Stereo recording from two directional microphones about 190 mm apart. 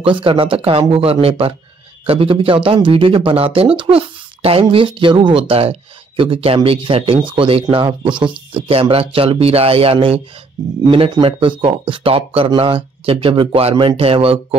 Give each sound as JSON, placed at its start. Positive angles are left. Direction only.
{"t": 0.0, "sound": "speech", "side_deg": -25}